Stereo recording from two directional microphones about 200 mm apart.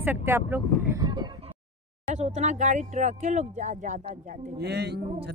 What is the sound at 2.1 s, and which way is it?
Speech, 35° right (ahead or behind).